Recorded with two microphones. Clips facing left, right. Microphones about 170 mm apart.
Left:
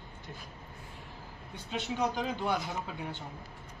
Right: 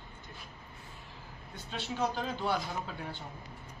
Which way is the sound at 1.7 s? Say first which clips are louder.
Left 2 dB; 15° left (ahead or behind).